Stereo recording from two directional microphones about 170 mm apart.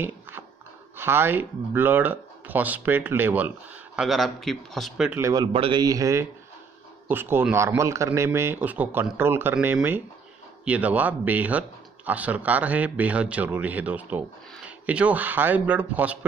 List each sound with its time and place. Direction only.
0.9 s speech: 15° right (ahead or behind)
5.2 s a man's voice: 25° right (ahead or behind); by 16.3 s 10° right (ahead or behind)